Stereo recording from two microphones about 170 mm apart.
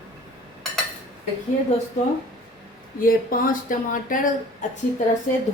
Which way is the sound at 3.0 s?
55° left (ahead or behind).